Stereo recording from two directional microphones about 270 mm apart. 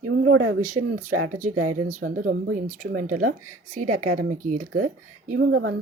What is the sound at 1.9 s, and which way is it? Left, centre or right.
Speech, right.